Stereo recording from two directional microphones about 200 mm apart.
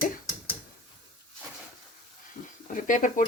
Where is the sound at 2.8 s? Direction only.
40° left (ahead or behind).